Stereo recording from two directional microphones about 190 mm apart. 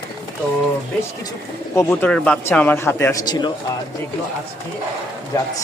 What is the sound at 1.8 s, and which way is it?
Speech, 10° left (ahead or behind).